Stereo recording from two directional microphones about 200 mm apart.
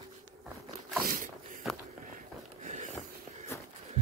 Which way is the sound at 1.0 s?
45° right (ahead or behind).